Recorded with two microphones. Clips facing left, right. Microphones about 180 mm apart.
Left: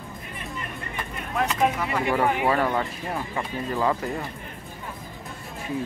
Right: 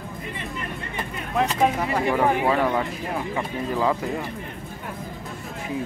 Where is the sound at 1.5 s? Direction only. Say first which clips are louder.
Even; 30° right (ahead or behind).